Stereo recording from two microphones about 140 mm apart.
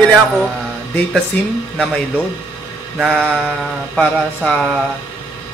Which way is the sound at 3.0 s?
10° right (ahead or behind).